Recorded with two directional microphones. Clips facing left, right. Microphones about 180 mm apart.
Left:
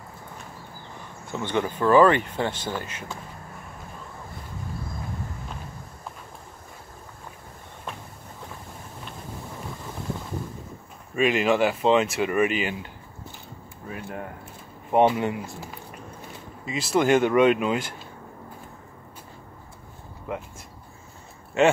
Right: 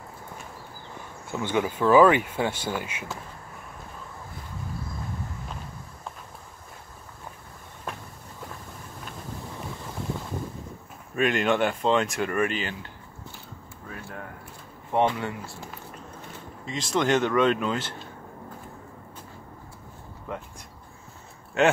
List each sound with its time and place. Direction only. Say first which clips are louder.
1.3 s speech: even; 10° right (ahead or behind)
11.1 s speech: left 2 dB; centre (ahead or behind)
13.8 s a sound: left 5 dB; 20° left (ahead or behind)
14.9 s speech: left 4 dB; 20° left (ahead or behind)
20.3 s speech: left 3 dB; 5° left (ahead or behind)
21.6 s speech: left 2 dB; centre (ahead or behind)